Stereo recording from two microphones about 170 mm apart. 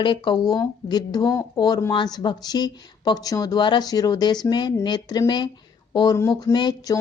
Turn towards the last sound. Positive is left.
turn(degrees=20)  # may be behind; listen again after turning